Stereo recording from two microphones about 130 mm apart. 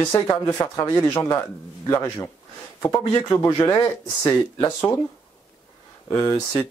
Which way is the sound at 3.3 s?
30° left (ahead or behind).